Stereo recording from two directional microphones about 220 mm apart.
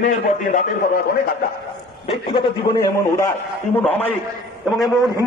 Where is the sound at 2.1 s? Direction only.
20° left (ahead or behind).